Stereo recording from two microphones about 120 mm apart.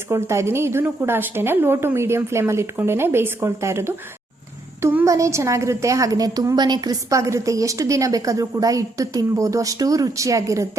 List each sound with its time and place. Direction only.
0.1 s a woman's voice: 20° right (ahead or behind)
5.0 s a woman's voice: 25° right (ahead or behind)